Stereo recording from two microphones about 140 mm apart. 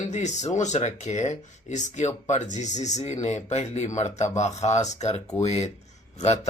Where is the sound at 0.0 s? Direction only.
55° left (ahead or behind).